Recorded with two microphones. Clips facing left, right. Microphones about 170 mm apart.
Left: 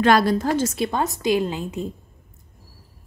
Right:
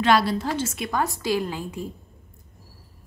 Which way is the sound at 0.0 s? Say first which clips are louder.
Left 3 dB; 50° left (ahead or behind).